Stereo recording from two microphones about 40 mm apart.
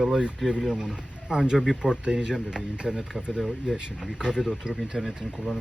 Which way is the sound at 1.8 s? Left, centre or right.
Centre.